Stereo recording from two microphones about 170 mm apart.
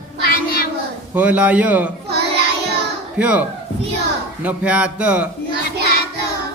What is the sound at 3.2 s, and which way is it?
Speech, 10° right (ahead or behind).